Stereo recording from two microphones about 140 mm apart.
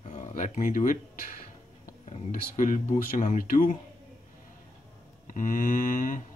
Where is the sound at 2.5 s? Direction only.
65° left (ahead or behind).